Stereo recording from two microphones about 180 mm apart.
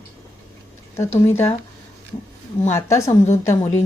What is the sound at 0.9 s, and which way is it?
Speech, 15° left (ahead or behind).